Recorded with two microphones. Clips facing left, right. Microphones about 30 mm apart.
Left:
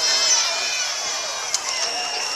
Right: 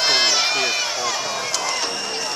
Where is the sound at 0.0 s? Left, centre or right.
Right.